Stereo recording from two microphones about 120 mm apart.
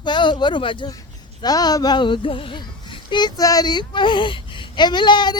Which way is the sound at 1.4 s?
35° left (ahead or behind).